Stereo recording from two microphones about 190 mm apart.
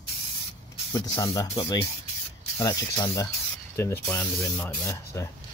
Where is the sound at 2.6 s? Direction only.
20° left (ahead or behind).